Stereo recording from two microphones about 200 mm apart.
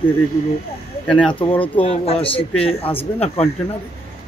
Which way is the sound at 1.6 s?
30° left (ahead or behind).